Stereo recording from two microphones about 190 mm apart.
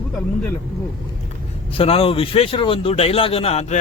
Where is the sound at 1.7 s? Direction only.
30° left (ahead or behind).